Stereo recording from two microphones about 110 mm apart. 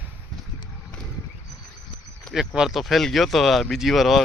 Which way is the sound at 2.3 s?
5° right (ahead or behind).